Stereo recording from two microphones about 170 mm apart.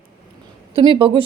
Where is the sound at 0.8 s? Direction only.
30° right (ahead or behind).